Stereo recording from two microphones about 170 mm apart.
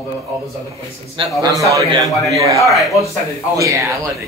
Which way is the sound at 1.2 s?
30° right (ahead or behind).